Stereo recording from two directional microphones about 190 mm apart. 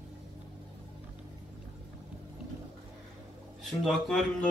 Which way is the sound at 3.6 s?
Centre (ahead or behind).